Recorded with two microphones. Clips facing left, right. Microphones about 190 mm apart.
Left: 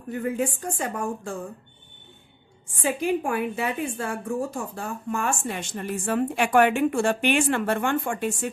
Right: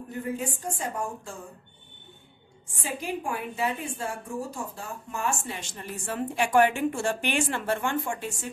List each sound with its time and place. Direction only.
0.2 s a woman's voice: 65° left (ahead or behind)
2.8 s a woman's voice: 60° left (ahead or behind)